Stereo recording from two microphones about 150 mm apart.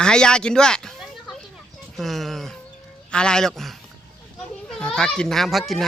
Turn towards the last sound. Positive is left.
turn(degrees=0)  # may be behind; listen again after turning